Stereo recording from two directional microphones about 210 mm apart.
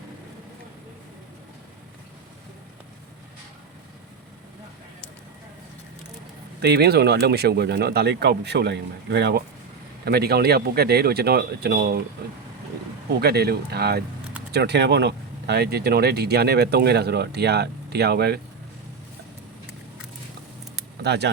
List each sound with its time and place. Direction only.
6.6 s speech: 50° right (ahead or behind)
13.1 s speech: 50° right (ahead or behind)
21.0 s speech: 55° right (ahead or behind)